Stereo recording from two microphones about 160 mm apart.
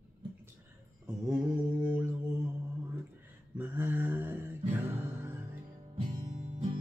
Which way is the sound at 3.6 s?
10° right (ahead or behind).